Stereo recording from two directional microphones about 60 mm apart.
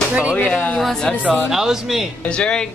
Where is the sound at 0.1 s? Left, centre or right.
Right.